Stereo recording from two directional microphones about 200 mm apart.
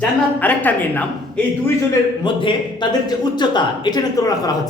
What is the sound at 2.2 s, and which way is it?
A man's voice, 25° left (ahead or behind).